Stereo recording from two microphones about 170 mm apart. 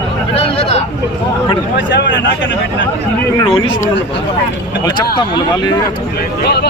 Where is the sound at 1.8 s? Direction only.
90° left.